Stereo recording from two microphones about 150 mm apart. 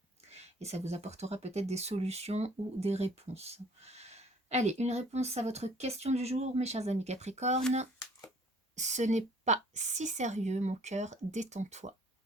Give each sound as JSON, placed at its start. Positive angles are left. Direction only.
{"t": 0.3, "sound": "speech", "side_deg": -45}
{"t": 8.7, "sound": "speech", "side_deg": -50}